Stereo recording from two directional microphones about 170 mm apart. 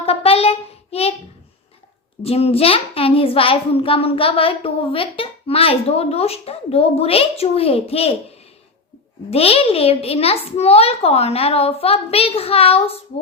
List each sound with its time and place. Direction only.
0.0 s child singing: 35° left (ahead or behind)
2.2 s a child's voice: 35° left (ahead or behind)
9.3 s a child's voice: 35° left (ahead or behind)